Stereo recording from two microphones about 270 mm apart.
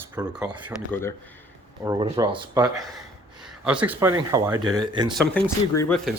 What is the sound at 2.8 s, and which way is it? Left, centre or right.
Speech, centre.